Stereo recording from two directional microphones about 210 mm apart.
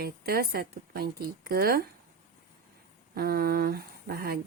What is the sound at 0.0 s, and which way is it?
Speech, 45° right (ahead or behind).